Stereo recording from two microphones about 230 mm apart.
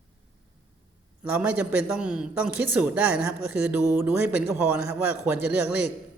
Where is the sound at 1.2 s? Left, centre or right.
Centre.